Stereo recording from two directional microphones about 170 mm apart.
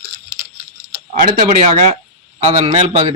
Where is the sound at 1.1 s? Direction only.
45° right (ahead or behind).